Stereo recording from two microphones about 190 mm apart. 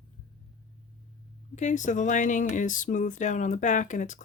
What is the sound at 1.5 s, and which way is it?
Speech, 40° left (ahead or behind).